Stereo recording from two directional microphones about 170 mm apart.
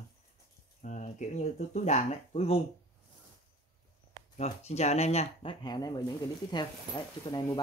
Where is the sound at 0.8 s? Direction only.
45° left (ahead or behind).